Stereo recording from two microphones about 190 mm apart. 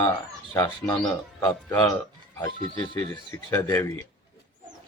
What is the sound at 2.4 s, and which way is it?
Speech, 25° left (ahead or behind).